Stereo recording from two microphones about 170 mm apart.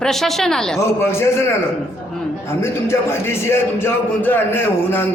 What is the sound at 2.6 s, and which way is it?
A man's voice, 15° left (ahead or behind).